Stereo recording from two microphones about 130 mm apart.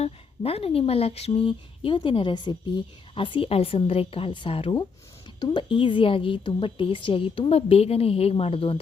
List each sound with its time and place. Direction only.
0.0 s speech: 50° left (ahead or behind)